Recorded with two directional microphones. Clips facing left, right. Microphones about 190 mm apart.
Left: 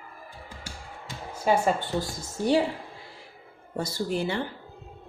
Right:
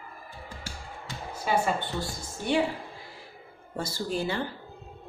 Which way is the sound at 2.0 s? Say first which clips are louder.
Left 5 dB; 35° left (ahead or behind).